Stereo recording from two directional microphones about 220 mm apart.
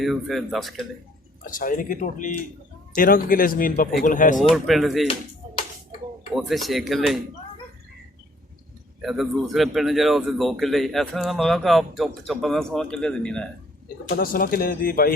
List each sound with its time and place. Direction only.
0.0 s speech: centre (ahead or behind)
1.5 s speech: 40° left (ahead or behind)
4.5 s speech: centre (ahead or behind)
6.3 s speech: centre (ahead or behind)
9.0 s speech: centre (ahead or behind)
14.1 s speech: 40° left (ahead or behind)